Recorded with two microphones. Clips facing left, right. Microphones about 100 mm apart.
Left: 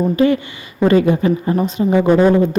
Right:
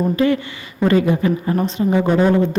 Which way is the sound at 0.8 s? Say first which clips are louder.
Left 3 dB; 25° left (ahead or behind).